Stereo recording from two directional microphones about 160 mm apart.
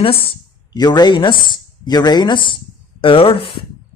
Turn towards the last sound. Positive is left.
turn(degrees=35)  # may be behind; listen again after turning